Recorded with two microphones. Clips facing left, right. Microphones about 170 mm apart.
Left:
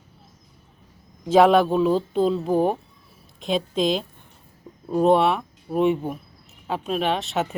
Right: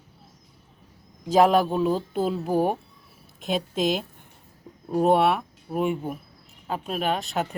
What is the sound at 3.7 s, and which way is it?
Speech, 50° right (ahead or behind).